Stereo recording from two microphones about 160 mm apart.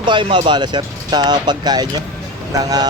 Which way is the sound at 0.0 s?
30° right (ahead or behind).